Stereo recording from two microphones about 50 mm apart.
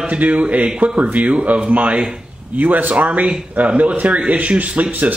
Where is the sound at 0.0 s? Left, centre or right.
Right.